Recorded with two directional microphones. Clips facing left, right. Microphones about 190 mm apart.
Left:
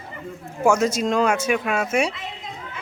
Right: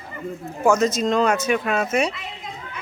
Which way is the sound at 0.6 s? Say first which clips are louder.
Right 1 dB; 10° left (ahead or behind).